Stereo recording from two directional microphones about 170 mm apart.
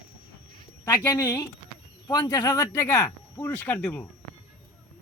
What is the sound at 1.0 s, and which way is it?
Speech, 15° left (ahead or behind).